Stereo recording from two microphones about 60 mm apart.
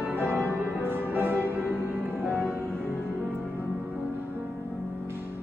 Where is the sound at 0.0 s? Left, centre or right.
Right.